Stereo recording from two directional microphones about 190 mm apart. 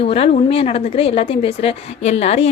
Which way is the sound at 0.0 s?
30° left (ahead or behind).